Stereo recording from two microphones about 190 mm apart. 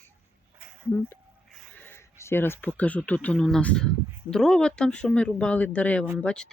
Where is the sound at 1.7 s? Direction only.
10° left (ahead or behind).